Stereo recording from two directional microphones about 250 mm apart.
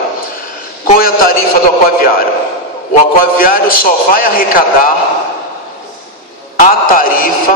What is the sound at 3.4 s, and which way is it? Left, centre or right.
A man's voice, left.